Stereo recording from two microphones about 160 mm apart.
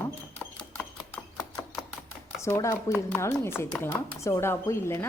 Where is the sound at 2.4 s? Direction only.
15° left (ahead or behind).